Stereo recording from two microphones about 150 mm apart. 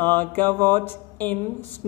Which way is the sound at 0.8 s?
10° left (ahead or behind).